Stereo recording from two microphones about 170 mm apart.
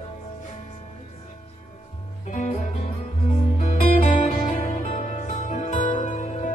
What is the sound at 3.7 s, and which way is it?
Music, 40° left (ahead or behind).